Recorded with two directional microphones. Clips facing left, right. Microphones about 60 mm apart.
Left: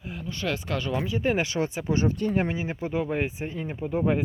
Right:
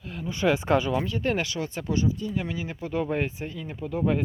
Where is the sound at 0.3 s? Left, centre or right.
Centre.